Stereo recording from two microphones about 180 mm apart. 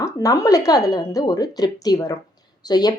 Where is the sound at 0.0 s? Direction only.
20° left (ahead or behind).